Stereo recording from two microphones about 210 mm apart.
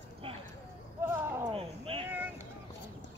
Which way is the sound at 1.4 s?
25° right (ahead or behind).